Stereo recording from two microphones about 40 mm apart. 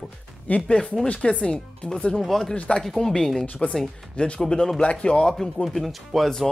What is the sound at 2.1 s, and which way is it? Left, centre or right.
Speech, centre.